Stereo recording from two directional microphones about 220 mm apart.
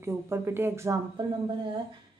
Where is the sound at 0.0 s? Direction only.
10° right (ahead or behind).